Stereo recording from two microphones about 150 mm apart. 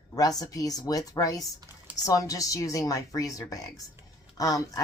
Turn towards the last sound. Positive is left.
turn(degrees=25)  # may be behind; listen again after turning